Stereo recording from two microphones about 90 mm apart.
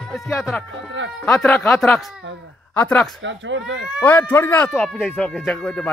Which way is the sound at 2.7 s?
15° left (ahead or behind).